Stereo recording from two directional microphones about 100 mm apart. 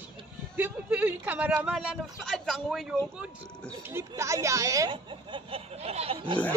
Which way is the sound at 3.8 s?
25° right (ahead or behind).